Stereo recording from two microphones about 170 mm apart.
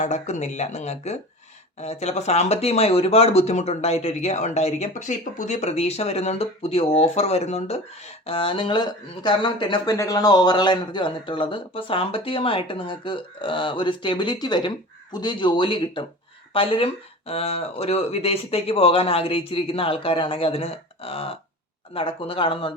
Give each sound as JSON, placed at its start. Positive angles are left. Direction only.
{"t": 0.0, "sound": "speech", "side_deg": 45}